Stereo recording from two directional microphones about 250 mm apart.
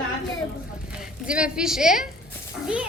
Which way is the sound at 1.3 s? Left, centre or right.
Centre.